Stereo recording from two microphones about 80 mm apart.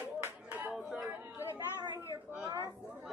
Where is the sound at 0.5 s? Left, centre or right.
Centre.